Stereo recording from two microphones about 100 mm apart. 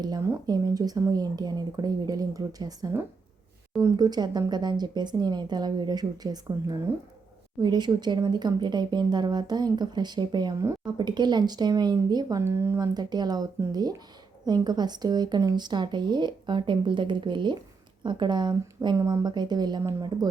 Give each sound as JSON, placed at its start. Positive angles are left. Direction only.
{"t": 0.4, "sound": "a woman's voice", "side_deg": -40}
{"t": 12.4, "sound": "speech", "side_deg": -25}
{"t": 12.8, "sound": "speech", "side_deg": -45}